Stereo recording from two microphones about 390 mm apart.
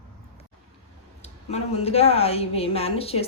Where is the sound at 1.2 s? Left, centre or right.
Centre.